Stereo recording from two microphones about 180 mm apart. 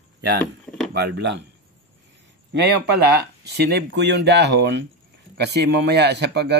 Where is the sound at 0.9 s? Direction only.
70° right (ahead or behind).